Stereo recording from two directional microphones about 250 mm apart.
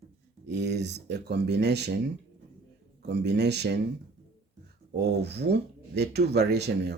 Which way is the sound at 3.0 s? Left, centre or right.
Right.